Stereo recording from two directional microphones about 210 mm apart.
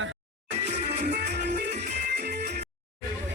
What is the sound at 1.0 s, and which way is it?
Music, 50° right (ahead or behind).